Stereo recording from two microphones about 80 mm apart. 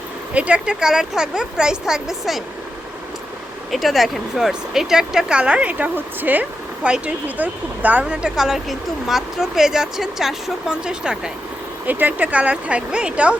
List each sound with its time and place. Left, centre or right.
0.3 s speech: centre
3.7 s speech: centre; by 8.3 s right
8.4 s speech: centre
11.9 s speech: right